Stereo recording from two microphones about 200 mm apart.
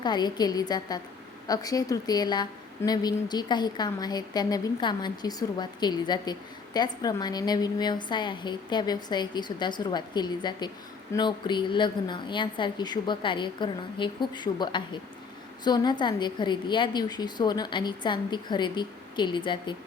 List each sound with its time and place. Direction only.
0.0 s a woman's voice: 20° left (ahead or behind)